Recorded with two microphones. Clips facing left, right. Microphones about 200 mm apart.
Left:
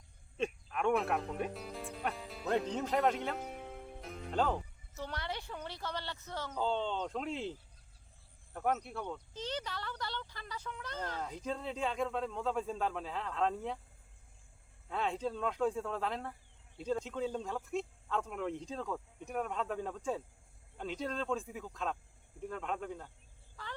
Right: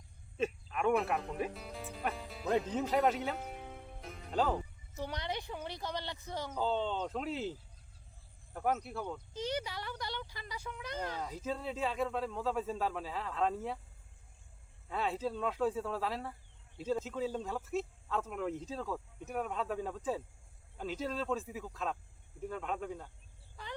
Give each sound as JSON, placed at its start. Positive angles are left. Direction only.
{"t": 0.3, "sound": "music", "side_deg": -5}
{"t": 4.9, "sound": "a sound", "side_deg": -15}
{"t": 5.5, "sound": "speech", "side_deg": -15}
{"t": 6.6, "sound": "speech", "side_deg": -5}
{"t": 8.5, "sound": "speech", "side_deg": -5}
{"t": 14.8, "sound": "speech", "side_deg": 0}
{"t": 23.6, "sound": "a sound", "side_deg": -15}